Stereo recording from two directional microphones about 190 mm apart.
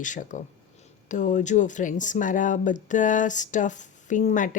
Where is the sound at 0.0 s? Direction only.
40° left (ahead or behind).